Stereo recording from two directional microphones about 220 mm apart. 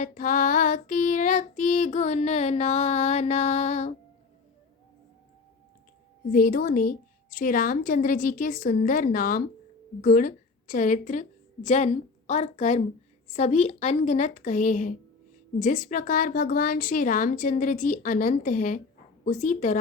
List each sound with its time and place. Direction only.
0.0 s female singing: 35° left (ahead or behind)
6.3 s female singing: 40° left (ahead or behind)
10.0 s a woman's voice: 40° left (ahead or behind)
13.2 s female singing: 30° left (ahead or behind)